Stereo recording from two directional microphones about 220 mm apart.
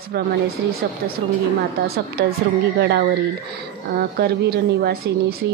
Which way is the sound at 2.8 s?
50° right (ahead or behind).